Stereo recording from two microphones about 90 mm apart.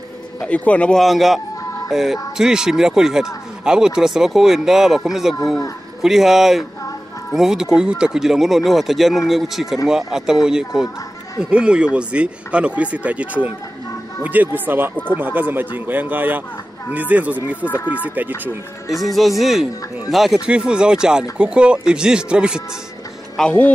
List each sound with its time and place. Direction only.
0.4 s speech: 15° left (ahead or behind)
0.9 s speech: centre (ahead or behind); by 18.5 s 20° right (ahead or behind)
18.9 s speech: centre (ahead or behind)
23.4 s speech: 5° left (ahead or behind)